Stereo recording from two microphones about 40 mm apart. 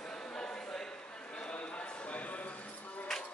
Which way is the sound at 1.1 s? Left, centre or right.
Left.